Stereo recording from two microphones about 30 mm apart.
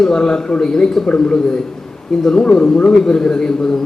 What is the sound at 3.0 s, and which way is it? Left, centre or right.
Speech, left.